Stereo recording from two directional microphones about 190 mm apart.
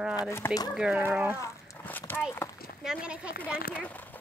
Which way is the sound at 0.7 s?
5° right (ahead or behind).